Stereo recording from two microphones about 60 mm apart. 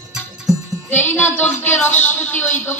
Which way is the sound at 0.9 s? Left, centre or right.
Left.